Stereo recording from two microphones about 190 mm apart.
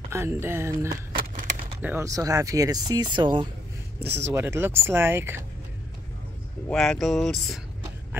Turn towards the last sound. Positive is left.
turn(degrees=0)  # may be behind; listen again after turning